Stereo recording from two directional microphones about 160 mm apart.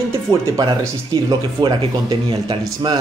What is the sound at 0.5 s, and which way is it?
Speech, 20° right (ahead or behind).